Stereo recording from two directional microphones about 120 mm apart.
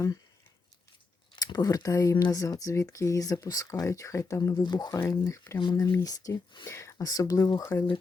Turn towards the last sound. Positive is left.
turn(degrees=30)  # may be behind; listen again after turning